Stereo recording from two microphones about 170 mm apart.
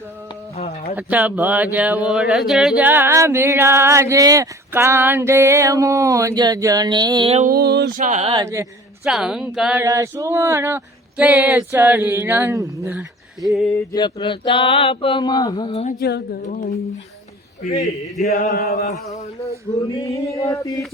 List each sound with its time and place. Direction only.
0.5 s a sound: 40° left (ahead or behind)
0.9 s a sound: 10° right (ahead or behind); by 7.3 s 25° right (ahead or behind)
7.4 s a sound: 65° right (ahead or behind)
7.9 s speech: 45° right (ahead or behind)
9.0 s speech: 5° right (ahead or behind)
9.8 s a sound: 20° right (ahead or behind)
12.9 s speech: 5° right (ahead or behind)
13.7 s speech: 25° left (ahead or behind)
15.7 s male singing: 40° left (ahead or behind)
16.0 s humming: 70° left (ahead or behind)
18.3 s humming: 60° left (ahead or behind)
19.1 s male singing: 35° left (ahead or behind)
20.0 s chant: 20° left (ahead or behind)